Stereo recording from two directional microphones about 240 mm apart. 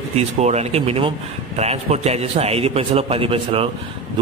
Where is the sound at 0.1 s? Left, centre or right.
Right.